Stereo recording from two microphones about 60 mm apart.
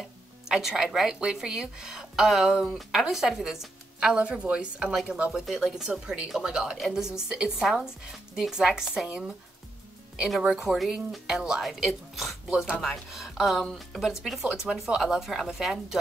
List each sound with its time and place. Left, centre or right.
0.0 s music: centre
0.8 s speech: centre
5.3 s speech: centre
10.2 s a woman's voice: centre